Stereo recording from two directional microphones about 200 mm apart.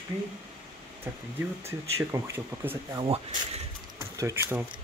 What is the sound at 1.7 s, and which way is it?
Speech, 15° right (ahead or behind).